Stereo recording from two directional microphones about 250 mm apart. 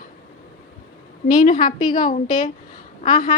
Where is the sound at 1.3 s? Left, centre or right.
Left.